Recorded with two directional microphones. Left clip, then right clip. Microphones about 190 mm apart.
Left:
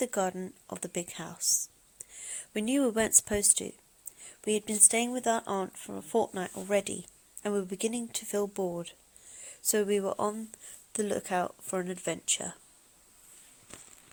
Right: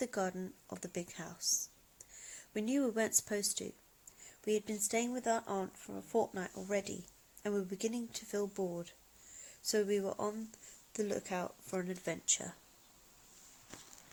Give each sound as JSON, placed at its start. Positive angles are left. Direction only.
{"t": 0.0, "sound": "speech", "side_deg": 25}